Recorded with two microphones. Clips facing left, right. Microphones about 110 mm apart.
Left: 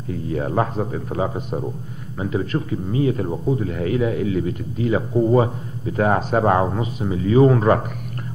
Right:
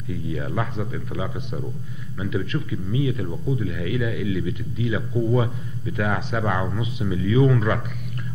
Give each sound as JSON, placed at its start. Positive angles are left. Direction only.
{"t": 0.1, "sound": "a man's voice", "side_deg": 45}